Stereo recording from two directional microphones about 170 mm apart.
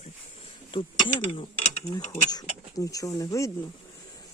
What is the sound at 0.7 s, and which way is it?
Speech, 30° left (ahead or behind).